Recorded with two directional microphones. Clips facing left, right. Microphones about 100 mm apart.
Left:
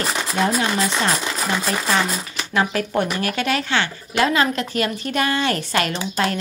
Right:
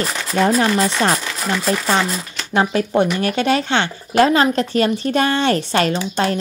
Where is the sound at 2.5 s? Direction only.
25° right (ahead or behind).